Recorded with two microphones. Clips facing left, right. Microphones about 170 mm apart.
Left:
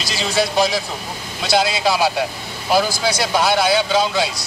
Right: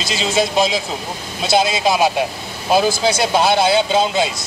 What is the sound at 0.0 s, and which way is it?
Speech, 25° right (ahead or behind).